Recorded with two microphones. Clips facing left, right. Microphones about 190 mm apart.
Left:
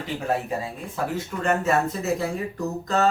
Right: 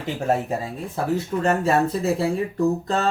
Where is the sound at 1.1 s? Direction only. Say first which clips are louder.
Right 4 dB; 35° right (ahead or behind).